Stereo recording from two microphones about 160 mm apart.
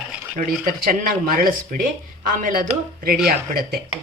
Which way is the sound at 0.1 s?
10° right (ahead or behind).